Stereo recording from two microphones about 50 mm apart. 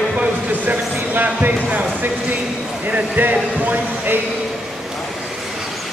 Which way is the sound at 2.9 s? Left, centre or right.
Right.